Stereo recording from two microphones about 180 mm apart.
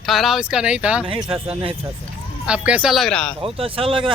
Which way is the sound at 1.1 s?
30° right (ahead or behind).